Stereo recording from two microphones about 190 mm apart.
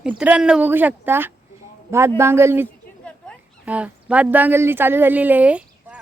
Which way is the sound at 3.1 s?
5° left (ahead or behind).